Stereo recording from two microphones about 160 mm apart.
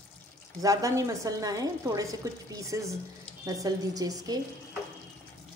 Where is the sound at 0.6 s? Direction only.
20° right (ahead or behind).